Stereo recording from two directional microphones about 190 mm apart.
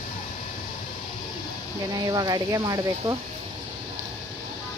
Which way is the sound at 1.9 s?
20° right (ahead or behind).